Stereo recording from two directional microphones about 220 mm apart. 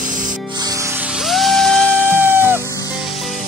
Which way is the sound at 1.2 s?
Centre (ahead or behind).